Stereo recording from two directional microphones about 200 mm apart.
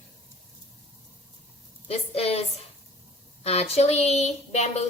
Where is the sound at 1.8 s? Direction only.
30° left (ahead or behind).